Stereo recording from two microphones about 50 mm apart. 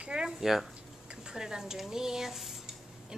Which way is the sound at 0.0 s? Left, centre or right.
Centre.